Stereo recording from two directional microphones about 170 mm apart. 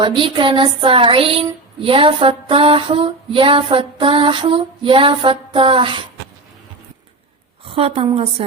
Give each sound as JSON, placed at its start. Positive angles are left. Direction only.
{"t": 0.0, "sound": "female singing", "side_deg": -30}
{"t": 7.6, "sound": "a woman's voice", "side_deg": -35}